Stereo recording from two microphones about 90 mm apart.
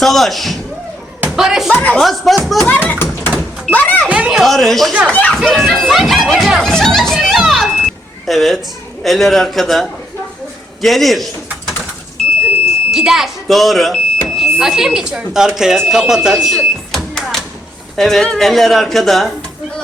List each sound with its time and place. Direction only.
0.0 s speech: centre (ahead or behind)
1.7 s speech: 15° left (ahead or behind)
2.0 s speech: centre (ahead or behind)
2.6 s a child's voice: 20° left (ahead or behind)
4.1 s speech: 10° right (ahead or behind)
5.1 s speech: 15° left (ahead or behind)
5.4 s speech: centre (ahead or behind)
12.9 s speech: 5° right (ahead or behind)